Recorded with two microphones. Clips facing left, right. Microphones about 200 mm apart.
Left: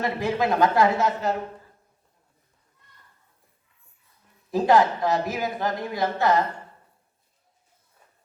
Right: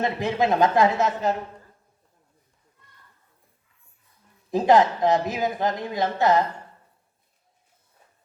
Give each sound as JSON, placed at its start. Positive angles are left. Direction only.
{"t": 0.0, "sound": "speech", "side_deg": -20}
{"t": 4.5, "sound": "speech", "side_deg": -20}